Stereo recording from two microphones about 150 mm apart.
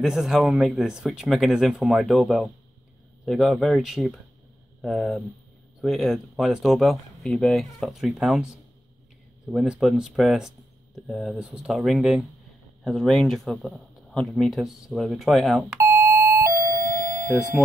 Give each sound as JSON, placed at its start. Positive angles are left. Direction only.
{"t": 0.0, "sound": "speech", "side_deg": -5}
{"t": 9.5, "sound": "speech", "side_deg": 0}
{"t": 15.8, "sound": "doorbell", "side_deg": -15}